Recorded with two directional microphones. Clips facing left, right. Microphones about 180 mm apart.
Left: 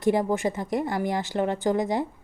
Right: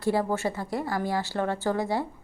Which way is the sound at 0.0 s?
15° left (ahead or behind).